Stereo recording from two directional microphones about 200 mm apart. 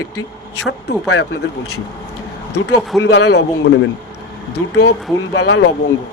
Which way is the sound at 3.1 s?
60° left (ahead or behind).